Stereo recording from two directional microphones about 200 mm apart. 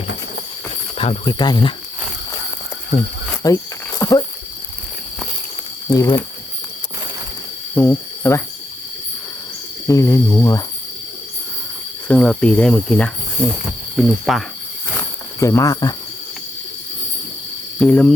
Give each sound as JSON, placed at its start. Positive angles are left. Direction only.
{"t": 0.9, "sound": "speech", "side_deg": 25}
{"t": 3.4, "sound": "cricket", "side_deg": 15}
{"t": 5.9, "sound": "speech", "side_deg": 15}
{"t": 7.8, "sound": "speech", "side_deg": 15}
{"t": 9.8, "sound": "speech", "side_deg": 15}
{"t": 12.0, "sound": "cricket", "side_deg": 5}
{"t": 14.9, "sound": "cricket", "side_deg": 15}
{"t": 17.7, "sound": "cricket", "side_deg": 5}